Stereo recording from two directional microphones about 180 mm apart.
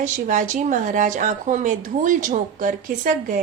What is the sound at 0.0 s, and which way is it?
Speech, 45° right (ahead or behind).